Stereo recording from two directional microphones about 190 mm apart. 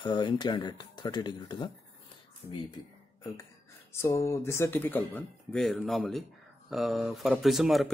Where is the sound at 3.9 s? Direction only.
15° left (ahead or behind).